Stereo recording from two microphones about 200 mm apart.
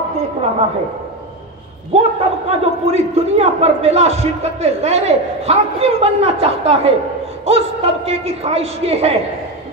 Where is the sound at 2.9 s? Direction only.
30° right (ahead or behind).